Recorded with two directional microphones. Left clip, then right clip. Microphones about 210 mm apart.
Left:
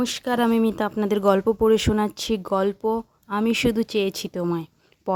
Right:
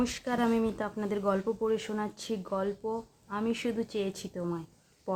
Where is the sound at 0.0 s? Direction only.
35° left (ahead or behind).